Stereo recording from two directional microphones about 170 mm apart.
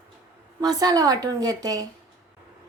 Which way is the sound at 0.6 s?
25° right (ahead or behind).